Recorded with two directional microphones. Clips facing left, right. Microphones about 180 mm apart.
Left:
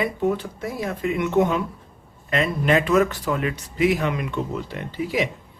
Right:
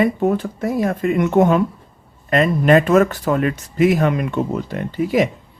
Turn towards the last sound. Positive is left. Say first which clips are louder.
# right 7 dB
turn(degrees=-45)  # may be behind; listen again after turning